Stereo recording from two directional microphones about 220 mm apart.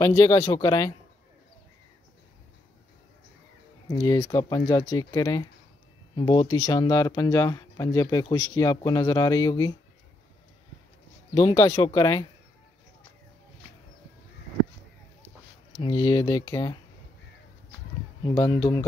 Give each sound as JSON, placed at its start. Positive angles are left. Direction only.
{"t": 0.0, "sound": "speech", "side_deg": 15}
{"t": 4.0, "sound": "speech", "side_deg": 15}
{"t": 11.3, "sound": "speech", "side_deg": 15}
{"t": 15.8, "sound": "speech", "side_deg": 20}
{"t": 18.2, "sound": "speech", "side_deg": 15}